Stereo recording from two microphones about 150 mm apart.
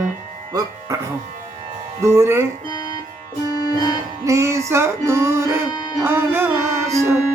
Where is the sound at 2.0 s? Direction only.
20° right (ahead or behind).